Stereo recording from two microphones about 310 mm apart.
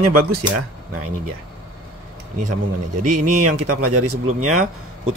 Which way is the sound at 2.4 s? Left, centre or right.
Right.